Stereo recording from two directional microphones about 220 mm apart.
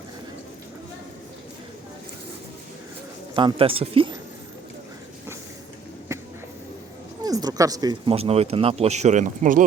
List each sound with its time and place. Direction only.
3.3 s speech: 25° right (ahead or behind)
6.1 s a sound: 15° right (ahead or behind)
7.2 s speech: 15° right (ahead or behind); by 9.6 s 35° right (ahead or behind)